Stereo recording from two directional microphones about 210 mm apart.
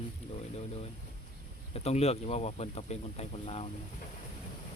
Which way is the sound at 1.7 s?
30° left (ahead or behind).